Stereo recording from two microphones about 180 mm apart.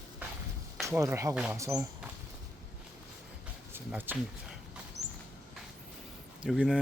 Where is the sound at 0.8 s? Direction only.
15° right (ahead or behind).